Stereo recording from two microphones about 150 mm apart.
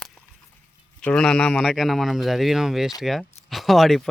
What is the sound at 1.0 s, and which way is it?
Speech, 5° left (ahead or behind).